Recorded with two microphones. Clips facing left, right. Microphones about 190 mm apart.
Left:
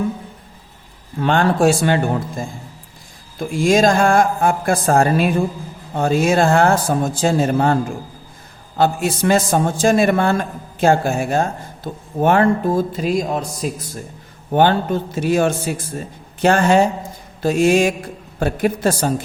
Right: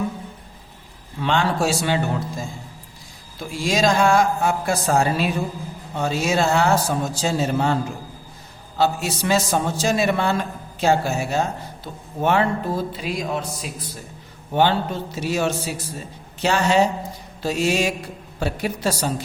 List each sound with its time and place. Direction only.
1.2 s a man's voice: 50° left (ahead or behind)